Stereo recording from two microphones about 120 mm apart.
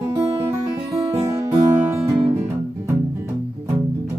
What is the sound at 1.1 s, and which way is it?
Music, 25° right (ahead or behind).